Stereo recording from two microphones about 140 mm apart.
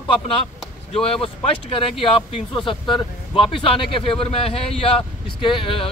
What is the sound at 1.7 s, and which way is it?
Speech, 40° left (ahead or behind).